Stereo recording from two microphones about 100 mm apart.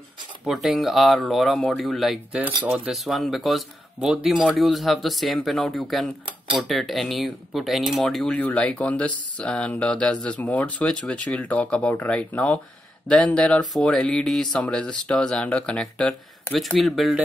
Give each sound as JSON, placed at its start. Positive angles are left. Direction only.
{"t": 0.5, "sound": "speech", "side_deg": 0}
{"t": 2.4, "sound": "speech", "side_deg": -15}
{"t": 2.9, "sound": "speech", "side_deg": 0}
{"t": 8.4, "sound": "speech", "side_deg": 15}